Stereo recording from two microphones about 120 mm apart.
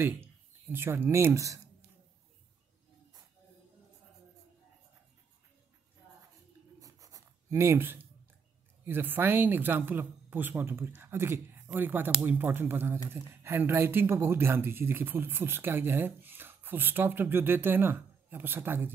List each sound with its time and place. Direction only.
0.0 s speech: 20° right (ahead or behind)
6.8 s writing: 30° right (ahead or behind)
8.8 s speech: 15° right (ahead or behind)